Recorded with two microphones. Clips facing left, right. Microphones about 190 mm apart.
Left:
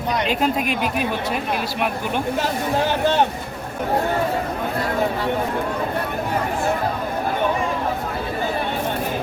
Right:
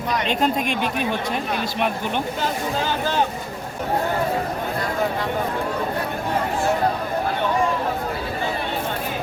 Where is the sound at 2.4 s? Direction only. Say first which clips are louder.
Left 3 dB; 65° left (ahead or behind).